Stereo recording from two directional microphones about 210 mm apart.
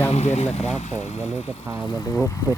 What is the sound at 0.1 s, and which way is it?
Speech, 30° left (ahead or behind).